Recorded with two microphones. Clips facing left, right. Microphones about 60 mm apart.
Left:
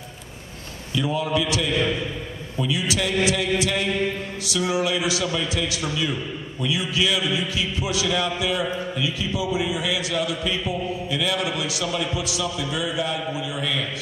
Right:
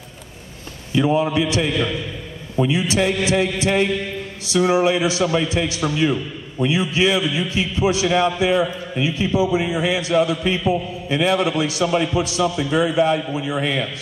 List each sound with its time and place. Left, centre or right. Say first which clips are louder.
0.9 s a man's voice: right 6 dB; right